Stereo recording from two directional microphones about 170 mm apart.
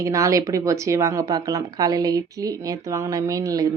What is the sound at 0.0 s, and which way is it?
A woman's voice, 20° right (ahead or behind).